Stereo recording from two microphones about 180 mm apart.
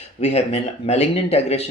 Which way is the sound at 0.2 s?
35° left (ahead or behind).